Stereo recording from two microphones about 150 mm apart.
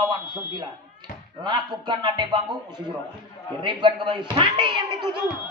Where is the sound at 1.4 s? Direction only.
30° right (ahead or behind).